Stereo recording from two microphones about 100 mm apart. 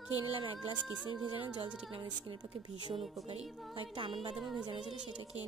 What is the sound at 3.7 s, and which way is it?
Speech, 55° right (ahead or behind).